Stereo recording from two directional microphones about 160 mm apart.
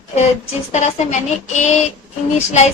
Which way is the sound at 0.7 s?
45° left (ahead or behind).